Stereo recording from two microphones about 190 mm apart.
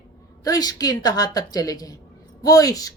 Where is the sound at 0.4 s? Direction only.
20° left (ahead or behind).